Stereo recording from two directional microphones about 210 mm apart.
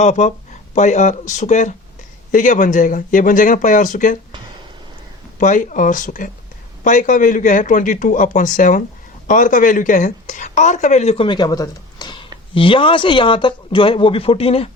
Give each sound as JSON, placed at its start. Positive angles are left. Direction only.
{"t": 0.0, "sound": "a man's voice", "side_deg": 35}
{"t": 5.4, "sound": "a man's voice", "side_deg": 35}